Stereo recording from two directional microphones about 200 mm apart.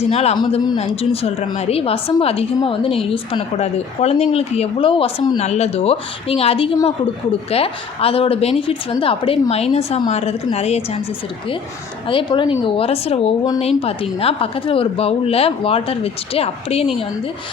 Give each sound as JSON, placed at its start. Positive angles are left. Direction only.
{"t": 0.0, "sound": "a woman's voice", "side_deg": 30}
{"t": 12.0, "sound": "a woman's voice", "side_deg": 25}